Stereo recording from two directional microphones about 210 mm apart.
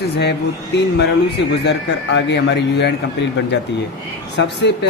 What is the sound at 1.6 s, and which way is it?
A man's voice, 55° left (ahead or behind).